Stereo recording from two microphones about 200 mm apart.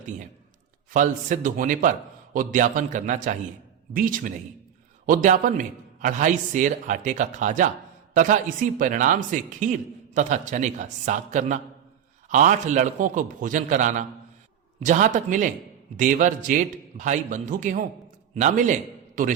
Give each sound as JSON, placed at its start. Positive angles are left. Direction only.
{"t": 0.9, "sound": "a man's voice", "side_deg": -40}